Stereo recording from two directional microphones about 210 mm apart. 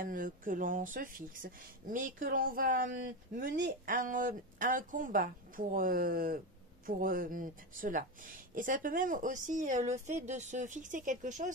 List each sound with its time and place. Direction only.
0.0 s speech: 40° right (ahead or behind)
3.3 s speech: 55° right (ahead or behind); by 11.5 s 35° right (ahead or behind)